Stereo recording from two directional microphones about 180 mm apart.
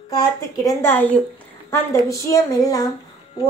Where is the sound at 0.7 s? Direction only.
10° left (ahead or behind).